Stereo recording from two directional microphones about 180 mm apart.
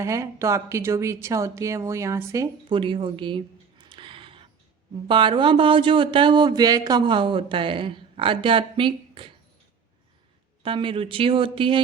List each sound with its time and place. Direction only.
0.0 s speech: 15° right (ahead or behind)
10.6 s speech: 30° right (ahead or behind)